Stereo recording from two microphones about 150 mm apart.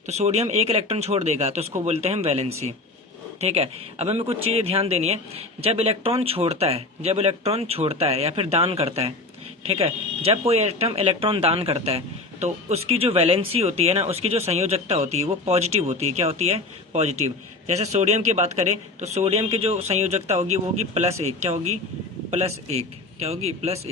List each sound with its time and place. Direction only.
0.1 s speech: 45° right (ahead or behind)